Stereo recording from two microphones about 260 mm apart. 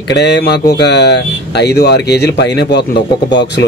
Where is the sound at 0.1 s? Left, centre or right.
Left.